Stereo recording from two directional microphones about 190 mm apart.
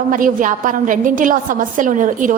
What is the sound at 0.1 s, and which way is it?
A woman's voice, 45° right (ahead or behind).